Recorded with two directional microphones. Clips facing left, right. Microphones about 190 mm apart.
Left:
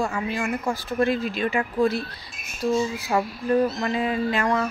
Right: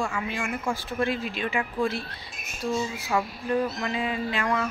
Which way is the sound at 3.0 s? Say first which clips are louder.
Left 4 dB; 40° left (ahead or behind).